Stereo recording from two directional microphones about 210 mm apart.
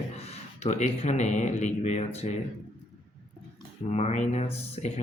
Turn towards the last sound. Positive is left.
turn(degrees=30)  # may be behind; listen again after turning